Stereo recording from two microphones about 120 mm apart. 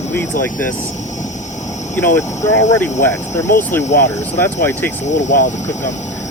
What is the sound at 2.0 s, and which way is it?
Speech, 15° left (ahead or behind).